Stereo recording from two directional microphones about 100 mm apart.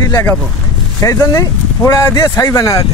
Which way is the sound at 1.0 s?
35° left (ahead or behind).